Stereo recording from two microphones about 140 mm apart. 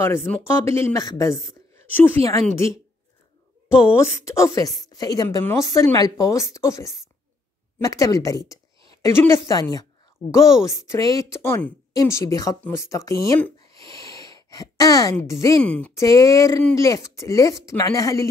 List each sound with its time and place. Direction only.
0.0 s a woman's voice: 15° left (ahead or behind)
4.0 s a woman's voice: 20° left (ahead or behind)
13.8 s a sound: 25° left (ahead or behind)
15.6 s speech: 10° left (ahead or behind)
16.0 s a woman's voice: 25° left (ahead or behind)